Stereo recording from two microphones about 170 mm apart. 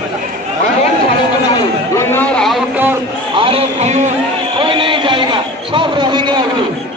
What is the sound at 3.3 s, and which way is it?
Speech, 35° right (ahead or behind).